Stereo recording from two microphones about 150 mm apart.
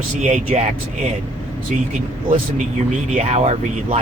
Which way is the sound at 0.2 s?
50° right (ahead or behind).